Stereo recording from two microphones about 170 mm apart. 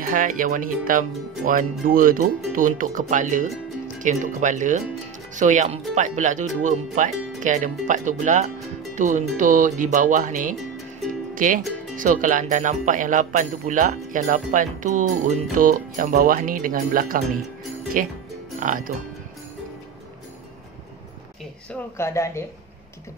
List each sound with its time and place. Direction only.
0.0 s speech: 50° right (ahead or behind)
21.6 s speech: 15° left (ahead or behind)